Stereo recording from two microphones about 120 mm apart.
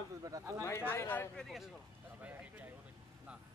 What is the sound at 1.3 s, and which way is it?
Speech, centre (ahead or behind).